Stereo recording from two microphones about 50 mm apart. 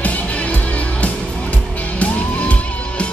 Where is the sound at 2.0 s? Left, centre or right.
Left.